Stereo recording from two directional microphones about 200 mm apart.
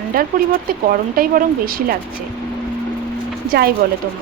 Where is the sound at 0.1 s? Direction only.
45° right (ahead or behind).